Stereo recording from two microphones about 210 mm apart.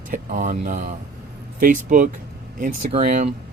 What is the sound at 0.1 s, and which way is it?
Speech, 40° right (ahead or behind).